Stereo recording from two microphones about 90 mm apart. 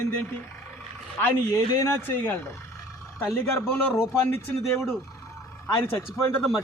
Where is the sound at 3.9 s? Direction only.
25° left (ahead or behind).